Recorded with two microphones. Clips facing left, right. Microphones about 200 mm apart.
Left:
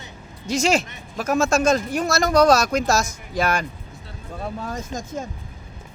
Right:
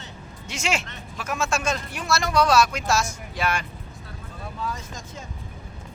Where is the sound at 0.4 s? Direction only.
35° left (ahead or behind).